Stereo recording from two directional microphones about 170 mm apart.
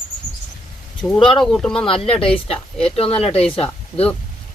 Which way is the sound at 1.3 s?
5° left (ahead or behind).